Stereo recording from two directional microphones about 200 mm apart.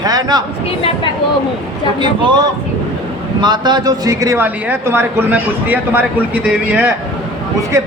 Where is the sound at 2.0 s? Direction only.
25° right (ahead or behind).